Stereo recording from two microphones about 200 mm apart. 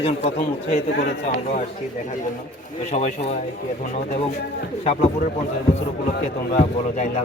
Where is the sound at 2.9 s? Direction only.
35° left (ahead or behind).